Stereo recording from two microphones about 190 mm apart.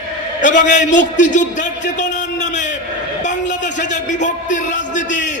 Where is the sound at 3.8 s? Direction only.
40° left (ahead or behind).